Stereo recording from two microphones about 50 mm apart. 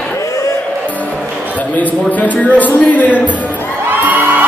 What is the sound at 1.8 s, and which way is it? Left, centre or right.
A man's voice, left.